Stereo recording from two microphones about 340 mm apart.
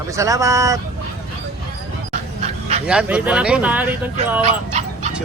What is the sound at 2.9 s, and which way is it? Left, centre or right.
Speech, centre.